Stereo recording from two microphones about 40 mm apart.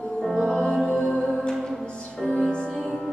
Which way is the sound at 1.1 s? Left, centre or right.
Centre.